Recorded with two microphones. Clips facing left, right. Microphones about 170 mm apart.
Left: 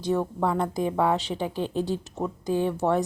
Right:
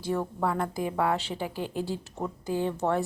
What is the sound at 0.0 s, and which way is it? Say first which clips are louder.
A woman's voice: left 4 dB; 20° left (ahead or behind).